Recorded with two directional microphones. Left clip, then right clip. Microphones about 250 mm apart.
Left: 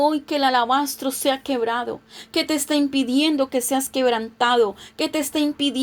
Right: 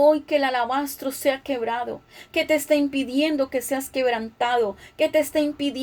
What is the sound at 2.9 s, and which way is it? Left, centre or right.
A woman's voice, left.